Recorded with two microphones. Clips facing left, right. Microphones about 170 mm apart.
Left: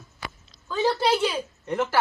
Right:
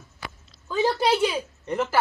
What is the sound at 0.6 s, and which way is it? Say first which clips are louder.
A woman's voice: right 1 dB; 10° right (ahead or behind).